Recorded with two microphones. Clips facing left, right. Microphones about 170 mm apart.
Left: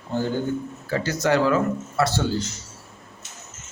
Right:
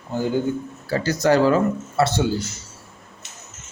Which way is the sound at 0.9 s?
35° right (ahead or behind).